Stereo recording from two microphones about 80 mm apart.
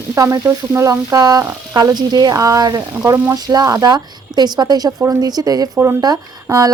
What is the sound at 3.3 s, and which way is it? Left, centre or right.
A woman's voice, right.